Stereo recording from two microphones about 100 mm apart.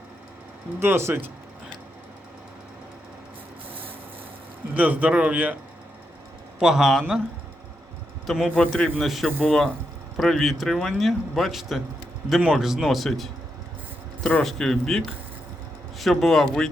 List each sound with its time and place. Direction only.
0.8 s speech: 25° right (ahead or behind)
4.7 s a man's voice: 15° right (ahead or behind)
6.6 s speech: 5° right (ahead or behind)
8.3 s speech: 5° left (ahead or behind)